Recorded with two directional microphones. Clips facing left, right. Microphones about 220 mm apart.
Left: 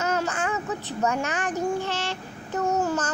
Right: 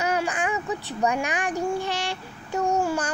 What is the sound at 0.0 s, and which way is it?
A child's voice, 15° right (ahead or behind).